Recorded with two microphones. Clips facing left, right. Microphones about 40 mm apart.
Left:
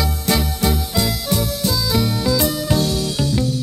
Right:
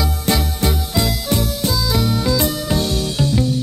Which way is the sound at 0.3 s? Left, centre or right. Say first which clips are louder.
Even; right.